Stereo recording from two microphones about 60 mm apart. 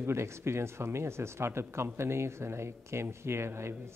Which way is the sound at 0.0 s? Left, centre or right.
Right.